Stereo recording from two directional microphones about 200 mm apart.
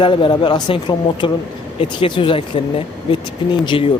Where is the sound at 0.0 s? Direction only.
25° left (ahead or behind).